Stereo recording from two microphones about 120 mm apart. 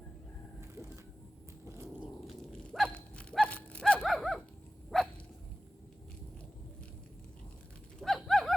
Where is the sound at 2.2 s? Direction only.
Centre (ahead or behind).